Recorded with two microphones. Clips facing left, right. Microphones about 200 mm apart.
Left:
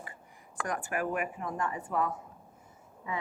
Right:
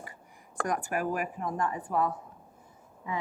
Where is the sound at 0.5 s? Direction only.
40° right (ahead or behind).